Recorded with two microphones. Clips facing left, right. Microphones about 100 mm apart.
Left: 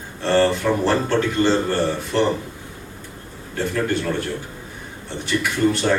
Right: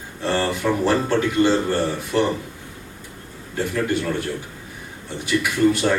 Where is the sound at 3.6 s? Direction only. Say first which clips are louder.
Even; 10° right (ahead or behind).